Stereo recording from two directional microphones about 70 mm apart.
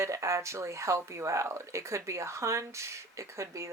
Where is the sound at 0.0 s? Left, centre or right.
Right.